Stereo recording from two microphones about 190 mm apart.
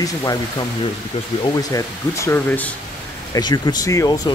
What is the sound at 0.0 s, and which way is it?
Speech, 20° left (ahead or behind).